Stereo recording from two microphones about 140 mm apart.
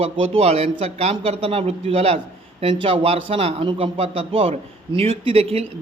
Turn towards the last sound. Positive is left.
turn(degrees=-45)  # may be behind; listen again after turning